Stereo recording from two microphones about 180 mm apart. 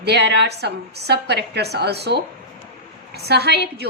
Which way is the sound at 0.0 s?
70° right (ahead or behind).